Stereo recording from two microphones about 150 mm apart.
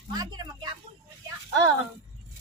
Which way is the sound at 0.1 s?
25° right (ahead or behind).